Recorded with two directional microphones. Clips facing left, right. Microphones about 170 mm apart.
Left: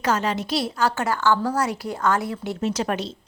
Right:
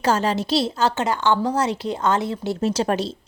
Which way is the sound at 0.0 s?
30° right (ahead or behind).